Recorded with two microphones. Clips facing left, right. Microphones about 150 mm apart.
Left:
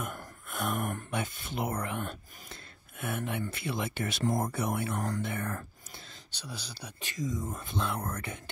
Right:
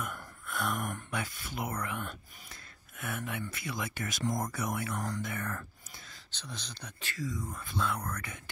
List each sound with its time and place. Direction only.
0.5 s a sound: 20° left (ahead or behind)
1.1 s speech: 25° left (ahead or behind)
6.3 s speech: 10° left (ahead or behind); by 8.4 s 25° left (ahead or behind)